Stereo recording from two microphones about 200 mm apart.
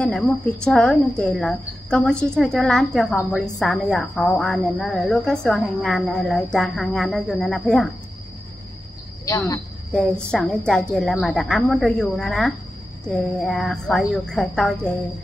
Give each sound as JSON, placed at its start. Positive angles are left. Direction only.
{"t": 0.7, "sound": "a woman's voice", "side_deg": 5}
{"t": 9.2, "sound": "speech", "side_deg": 15}
{"t": 9.9, "sound": "a woman's voice", "side_deg": 5}